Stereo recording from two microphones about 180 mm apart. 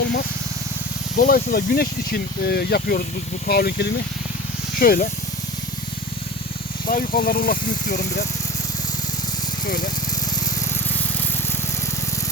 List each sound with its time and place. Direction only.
1.1 s speech: 50° left (ahead or behind)
6.8 s speech: 50° left (ahead or behind)
9.6 s speech: 50° left (ahead or behind)